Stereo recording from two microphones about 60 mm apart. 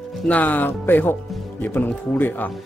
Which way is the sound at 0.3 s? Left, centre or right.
Left.